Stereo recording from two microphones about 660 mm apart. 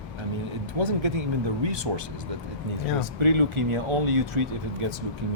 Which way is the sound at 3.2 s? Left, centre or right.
Right.